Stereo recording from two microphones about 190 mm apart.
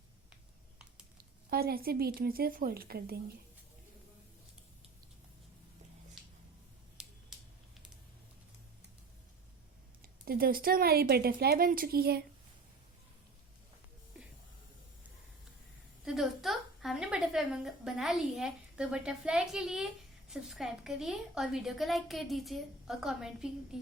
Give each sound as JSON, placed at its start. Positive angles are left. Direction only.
{"t": 1.5, "sound": "a woman's voice", "side_deg": -55}
{"t": 6.9, "sound": "a sound", "side_deg": -5}
{"t": 10.2, "sound": "a woman's voice", "side_deg": -50}
{"t": 16.0, "sound": "a woman's voice", "side_deg": 0}